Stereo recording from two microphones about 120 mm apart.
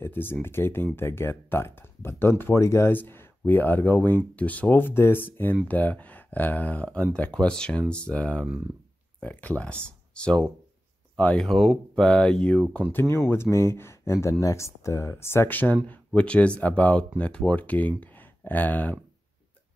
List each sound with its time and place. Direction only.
0.0 s speech: 15° left (ahead or behind)
13.1 s speech: 20° left (ahead or behind)